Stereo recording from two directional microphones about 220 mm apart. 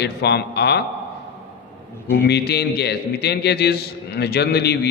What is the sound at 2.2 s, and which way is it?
A man's voice, 50° left (ahead or behind).